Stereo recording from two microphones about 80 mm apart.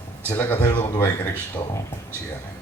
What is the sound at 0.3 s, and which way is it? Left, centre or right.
A woman's voice, left.